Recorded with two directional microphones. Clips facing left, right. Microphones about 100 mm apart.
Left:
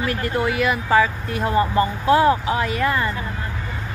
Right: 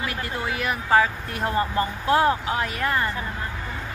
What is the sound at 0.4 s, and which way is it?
Speech, 90° left.